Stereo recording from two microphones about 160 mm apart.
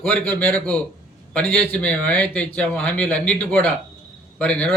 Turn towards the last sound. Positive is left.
turn(degrees=10)  # may be behind; listen again after turning